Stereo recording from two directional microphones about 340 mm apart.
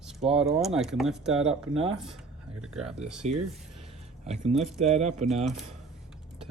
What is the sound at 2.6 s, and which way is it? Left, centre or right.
Speech, centre.